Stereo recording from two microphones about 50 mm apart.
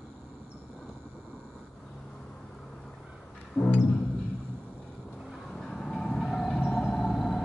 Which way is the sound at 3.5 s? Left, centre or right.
Left.